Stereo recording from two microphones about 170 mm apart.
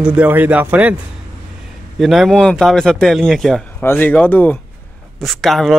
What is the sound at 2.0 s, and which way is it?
Speech, centre (ahead or behind).